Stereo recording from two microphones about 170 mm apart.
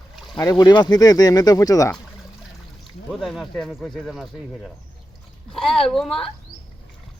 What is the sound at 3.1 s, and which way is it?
Speech, centre (ahead or behind).